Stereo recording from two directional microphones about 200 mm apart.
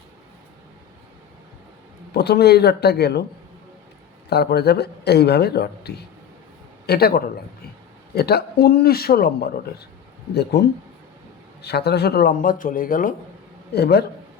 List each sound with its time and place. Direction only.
2.1 s speech: 55° left (ahead or behind)
4.3 s speech: 55° left (ahead or behind)
13.7 s speech: 55° left (ahead or behind)